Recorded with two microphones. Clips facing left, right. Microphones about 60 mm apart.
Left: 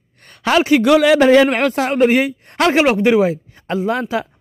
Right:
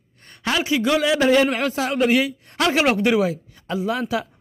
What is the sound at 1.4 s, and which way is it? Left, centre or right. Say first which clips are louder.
Speech: left 6 dB; left.